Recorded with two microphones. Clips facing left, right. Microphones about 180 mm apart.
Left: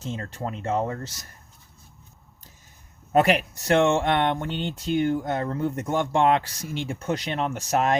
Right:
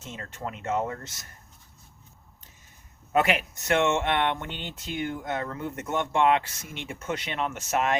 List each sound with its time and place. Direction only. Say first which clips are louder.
0.0 s speech: left 5 dB; 35° left (ahead or behind)
3.1 s speech: left 4 dB; 35° left (ahead or behind)